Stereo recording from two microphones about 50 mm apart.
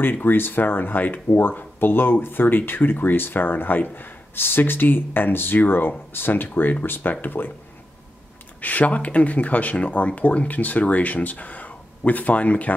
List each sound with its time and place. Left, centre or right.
0.0 s speech: left
8.5 s speech: left